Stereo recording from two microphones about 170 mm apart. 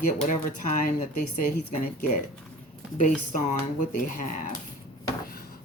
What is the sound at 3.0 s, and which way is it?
A woman's voice, 45° left (ahead or behind).